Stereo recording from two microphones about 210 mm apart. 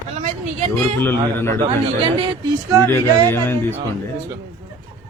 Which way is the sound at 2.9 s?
10° left (ahead or behind).